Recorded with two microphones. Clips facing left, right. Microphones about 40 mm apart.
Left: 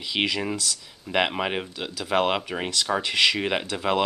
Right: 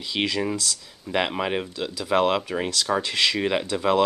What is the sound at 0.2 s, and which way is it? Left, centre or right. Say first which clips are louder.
Speech: right 1 dB; centre.